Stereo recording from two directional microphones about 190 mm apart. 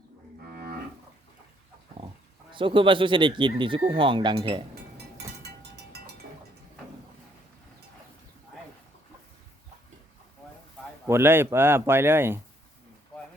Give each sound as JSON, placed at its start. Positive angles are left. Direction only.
{"t": 2.5, "sound": "speech", "side_deg": -25}
{"t": 5.4, "sound": "a sound", "side_deg": -60}
{"t": 11.0, "sound": "speech", "side_deg": -10}